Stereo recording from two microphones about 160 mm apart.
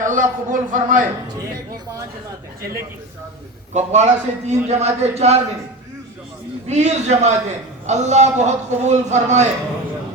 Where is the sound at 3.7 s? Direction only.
45° right (ahead or behind).